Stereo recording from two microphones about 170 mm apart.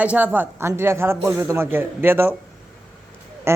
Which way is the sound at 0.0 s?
10° right (ahead or behind).